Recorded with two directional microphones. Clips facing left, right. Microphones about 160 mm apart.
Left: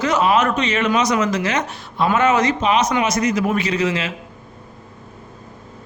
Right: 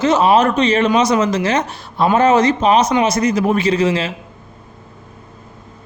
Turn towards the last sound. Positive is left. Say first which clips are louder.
# right 5 dB
turn(degrees=-30)  # may be behind; listen again after turning